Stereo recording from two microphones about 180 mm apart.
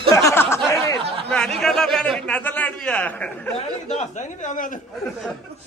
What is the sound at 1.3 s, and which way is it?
A man's voice, 5° left (ahead or behind).